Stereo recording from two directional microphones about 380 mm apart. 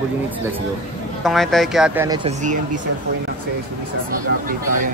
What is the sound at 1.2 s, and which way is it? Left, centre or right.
A woman's voice, centre.